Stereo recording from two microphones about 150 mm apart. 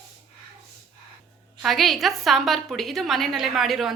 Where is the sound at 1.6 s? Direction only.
Centre (ahead or behind).